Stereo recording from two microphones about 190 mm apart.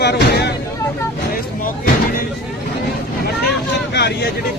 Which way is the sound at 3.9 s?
60° left (ahead or behind).